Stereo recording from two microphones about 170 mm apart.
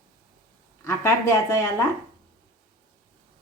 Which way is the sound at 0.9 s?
15° left (ahead or behind).